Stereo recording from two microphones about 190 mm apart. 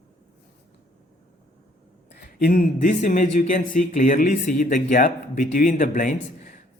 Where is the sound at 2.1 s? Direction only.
55° left (ahead or behind).